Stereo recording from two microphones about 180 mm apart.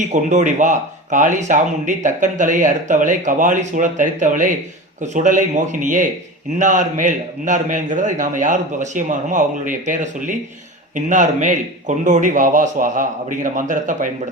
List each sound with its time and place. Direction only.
0.0 s speech: 40° right (ahead or behind)